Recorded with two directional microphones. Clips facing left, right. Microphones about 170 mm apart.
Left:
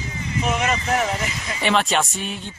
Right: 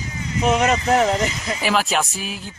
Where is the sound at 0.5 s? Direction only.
35° right (ahead or behind).